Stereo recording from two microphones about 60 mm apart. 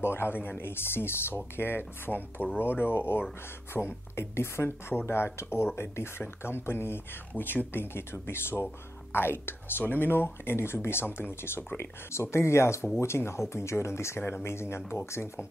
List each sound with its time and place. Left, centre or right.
0.0 s speech: left